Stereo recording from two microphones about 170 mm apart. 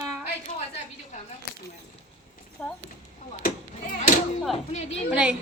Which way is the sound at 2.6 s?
5° left (ahead or behind).